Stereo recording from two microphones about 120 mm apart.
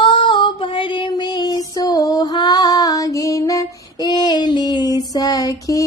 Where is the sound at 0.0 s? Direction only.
45° left (ahead or behind).